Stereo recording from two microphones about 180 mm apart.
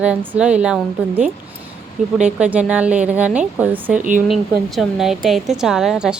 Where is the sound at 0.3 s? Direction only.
5° right (ahead or behind).